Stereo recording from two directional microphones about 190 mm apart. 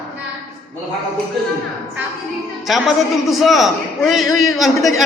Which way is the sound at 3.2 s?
Centre (ahead or behind).